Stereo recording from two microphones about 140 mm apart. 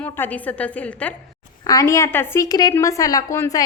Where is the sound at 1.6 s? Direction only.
25° left (ahead or behind).